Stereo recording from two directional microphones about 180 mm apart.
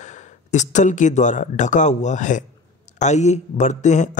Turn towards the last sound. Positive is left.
turn(degrees=40)  # may be behind; listen again after turning